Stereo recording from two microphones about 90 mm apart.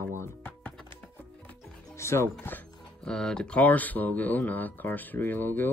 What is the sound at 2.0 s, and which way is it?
Speech, 30° left (ahead or behind).